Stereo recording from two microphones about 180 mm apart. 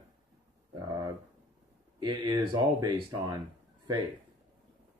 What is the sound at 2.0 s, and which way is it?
Speech, 25° right (ahead or behind).